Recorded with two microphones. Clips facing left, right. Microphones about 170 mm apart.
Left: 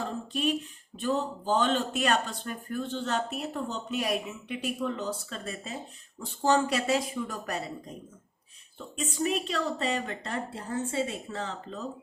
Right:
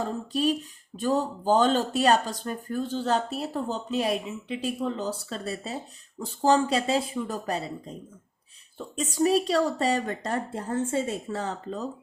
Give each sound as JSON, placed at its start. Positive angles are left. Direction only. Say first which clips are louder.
{"t": 0.3, "sound": "speech", "louder": "right 4 dB", "side_deg": -35}
{"t": 9.0, "sound": "speech", "louder": "right 6 dB", "side_deg": -35}